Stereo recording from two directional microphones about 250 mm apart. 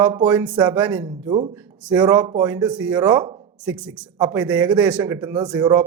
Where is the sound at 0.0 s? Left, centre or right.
Centre.